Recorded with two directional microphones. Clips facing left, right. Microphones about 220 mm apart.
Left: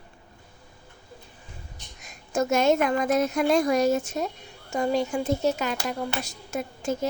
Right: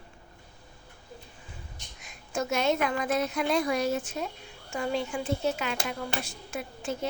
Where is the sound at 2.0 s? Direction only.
45° left (ahead or behind).